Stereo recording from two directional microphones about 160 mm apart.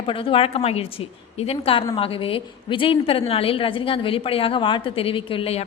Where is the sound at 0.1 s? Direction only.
35° left (ahead or behind).